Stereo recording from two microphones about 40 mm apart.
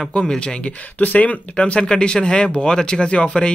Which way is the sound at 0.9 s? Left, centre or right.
Left.